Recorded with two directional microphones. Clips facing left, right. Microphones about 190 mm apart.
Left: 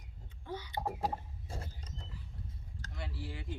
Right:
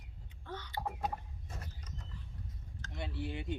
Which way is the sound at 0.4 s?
10° left (ahead or behind).